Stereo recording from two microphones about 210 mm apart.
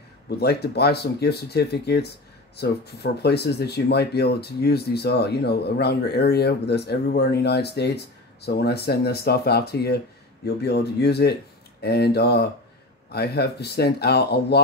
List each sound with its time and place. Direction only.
0.4 s speech: 50° left (ahead or behind)